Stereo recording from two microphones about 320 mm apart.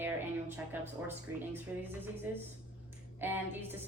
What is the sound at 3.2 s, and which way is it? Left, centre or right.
Speech, centre.